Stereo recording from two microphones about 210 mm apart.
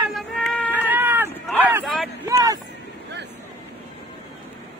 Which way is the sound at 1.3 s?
10° left (ahead or behind).